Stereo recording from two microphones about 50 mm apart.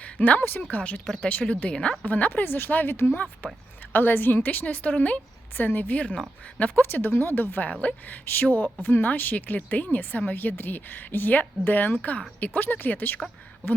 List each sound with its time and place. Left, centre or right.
0.0 s a woman's voice: left
0.7 s a woman's voice: left
1.0 s speech: centre
1.3 s speech: left
1.7 s speech: centre
2.0 s a woman's voice: left
3.4 s a woman's voice: left
3.9 s a woman's voice: left
7.1 s speech: left
7.7 s a woman's voice: left
8.9 s a woman's voice: left